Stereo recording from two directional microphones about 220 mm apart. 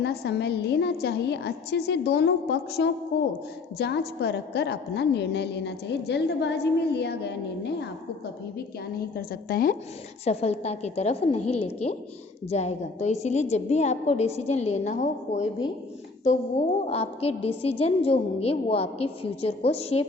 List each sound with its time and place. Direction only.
0.0 s a woman's voice: 50° left (ahead or behind)
9.1 s a woman's voice: 45° left (ahead or behind)
10.2 s a woman's voice: 30° left (ahead or behind)
16.8 s a woman's voice: 25° left (ahead or behind)